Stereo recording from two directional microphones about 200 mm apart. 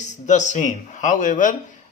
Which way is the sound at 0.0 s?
35° left (ahead or behind).